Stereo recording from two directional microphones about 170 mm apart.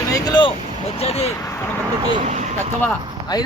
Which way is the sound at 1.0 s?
35° left (ahead or behind).